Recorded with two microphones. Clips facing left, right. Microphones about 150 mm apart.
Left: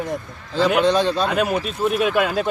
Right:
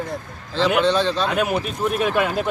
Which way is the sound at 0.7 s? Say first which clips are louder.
Left 1 dB; 10° left (ahead or behind).